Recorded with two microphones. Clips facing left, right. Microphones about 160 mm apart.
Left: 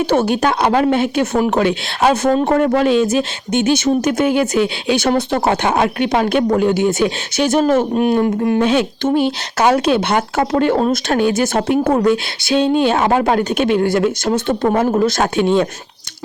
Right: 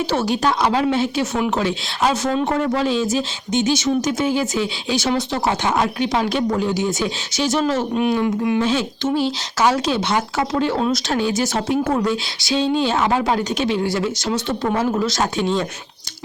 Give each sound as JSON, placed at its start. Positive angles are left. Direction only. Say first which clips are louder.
{"t": 0.1, "sound": "speech", "louder": "left 4 dB", "side_deg": 55}